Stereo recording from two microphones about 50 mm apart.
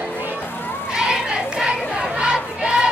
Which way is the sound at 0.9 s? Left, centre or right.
Centre.